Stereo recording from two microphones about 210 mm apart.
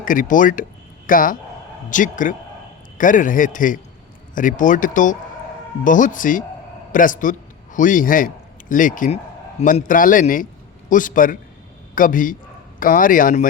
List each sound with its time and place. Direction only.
0.0 s a man's voice: 40° left (ahead or behind)